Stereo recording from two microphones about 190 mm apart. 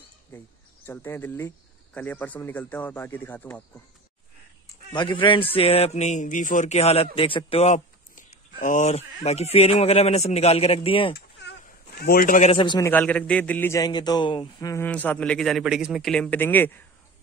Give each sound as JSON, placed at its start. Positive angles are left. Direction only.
{"t": 0.3, "sound": "a man's voice", "side_deg": 10}
{"t": 4.9, "sound": "speech", "side_deg": 25}
{"t": 11.1, "sound": "a sound", "side_deg": 55}
{"t": 12.5, "sound": "a man's voice", "side_deg": 25}
{"t": 12.9, "sound": "a man's voice", "side_deg": 5}
{"t": 14.9, "sound": "a man's voice", "side_deg": 5}